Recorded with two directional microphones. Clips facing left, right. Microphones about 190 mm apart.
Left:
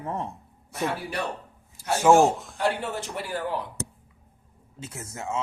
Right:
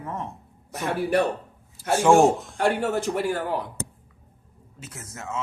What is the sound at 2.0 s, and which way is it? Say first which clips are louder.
Speech: right 1 dB; centre (ahead or behind).